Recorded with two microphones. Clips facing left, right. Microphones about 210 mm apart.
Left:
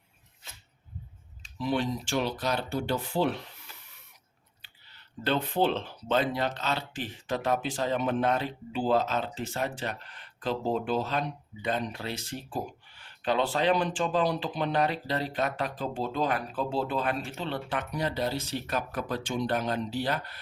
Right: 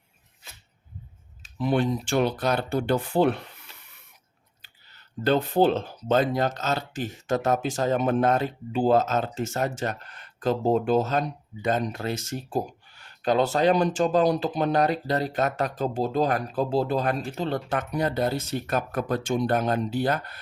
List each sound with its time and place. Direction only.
1.5 s speech: 55° right (ahead or behind)
4.6 s speech: 45° right (ahead or behind)